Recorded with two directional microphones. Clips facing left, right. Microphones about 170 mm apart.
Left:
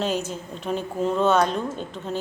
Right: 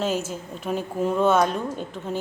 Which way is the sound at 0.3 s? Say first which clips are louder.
Even; 5° right (ahead or behind).